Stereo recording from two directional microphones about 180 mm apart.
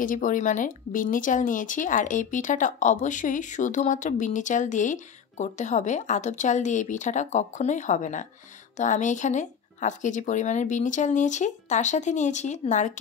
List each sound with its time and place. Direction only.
0.0 s speech: 45° left (ahead or behind)